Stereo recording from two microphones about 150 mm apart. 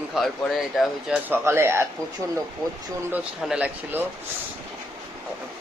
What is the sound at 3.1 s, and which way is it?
Speech, 5° right (ahead or behind).